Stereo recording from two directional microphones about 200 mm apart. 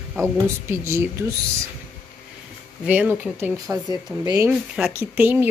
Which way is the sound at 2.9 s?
10° right (ahead or behind).